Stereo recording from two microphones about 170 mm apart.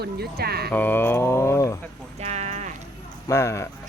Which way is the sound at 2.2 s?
40° right (ahead or behind).